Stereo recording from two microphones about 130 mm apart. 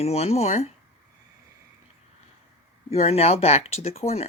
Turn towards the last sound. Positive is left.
turn(degrees=55)  # may be behind; listen again after turning